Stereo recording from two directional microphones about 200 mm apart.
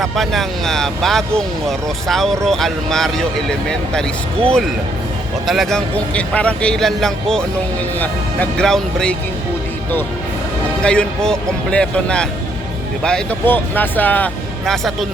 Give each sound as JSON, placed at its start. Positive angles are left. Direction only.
{"t": 0.0, "sound": "speech", "side_deg": 0}
{"t": 5.5, "sound": "speech", "side_deg": 0}
{"t": 10.8, "sound": "speech", "side_deg": 5}